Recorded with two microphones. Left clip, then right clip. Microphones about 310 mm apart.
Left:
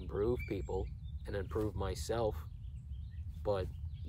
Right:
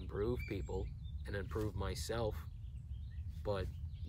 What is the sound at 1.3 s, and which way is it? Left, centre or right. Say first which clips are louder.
Speech: left 4 dB; centre.